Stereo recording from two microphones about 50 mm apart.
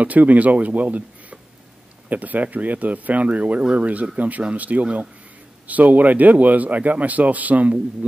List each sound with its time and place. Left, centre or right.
0.0 s speech: right